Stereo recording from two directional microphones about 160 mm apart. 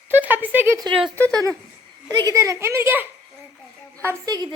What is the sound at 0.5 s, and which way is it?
Speech, 10° right (ahead or behind).